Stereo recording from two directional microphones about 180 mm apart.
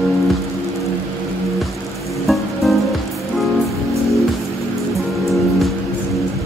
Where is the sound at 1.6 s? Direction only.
Centre (ahead or behind).